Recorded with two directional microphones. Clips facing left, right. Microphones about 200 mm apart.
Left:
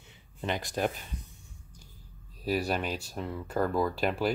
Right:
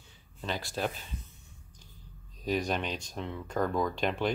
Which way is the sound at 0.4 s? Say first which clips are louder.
Left 3 dB; 20° left (ahead or behind).